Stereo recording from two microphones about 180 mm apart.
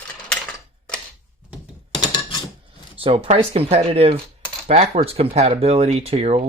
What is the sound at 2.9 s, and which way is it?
Speech, 30° right (ahead or behind).